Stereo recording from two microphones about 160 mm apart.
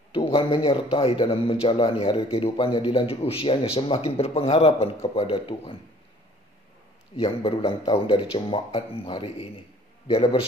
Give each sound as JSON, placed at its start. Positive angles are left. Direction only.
{"t": 0.1, "sound": "a man's voice", "side_deg": 35}
{"t": 7.2, "sound": "a man's voice", "side_deg": 35}